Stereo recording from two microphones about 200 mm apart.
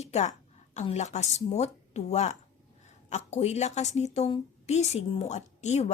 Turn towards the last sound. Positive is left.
turn(degrees=35)  # may be behind; listen again after turning